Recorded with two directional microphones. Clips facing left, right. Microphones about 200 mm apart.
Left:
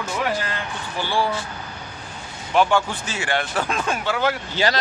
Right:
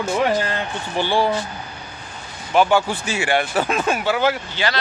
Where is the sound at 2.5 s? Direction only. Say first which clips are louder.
Right 2 dB; 5° right (ahead or behind).